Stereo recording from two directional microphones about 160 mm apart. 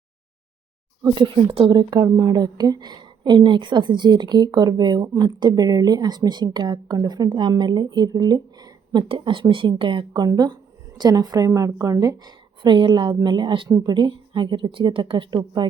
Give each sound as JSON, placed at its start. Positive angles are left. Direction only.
{"t": 1.0, "sound": "speech", "side_deg": -30}